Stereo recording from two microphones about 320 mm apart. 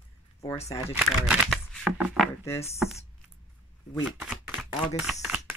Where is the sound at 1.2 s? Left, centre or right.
Centre.